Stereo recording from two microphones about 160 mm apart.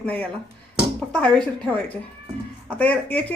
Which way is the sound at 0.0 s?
10° left (ahead or behind).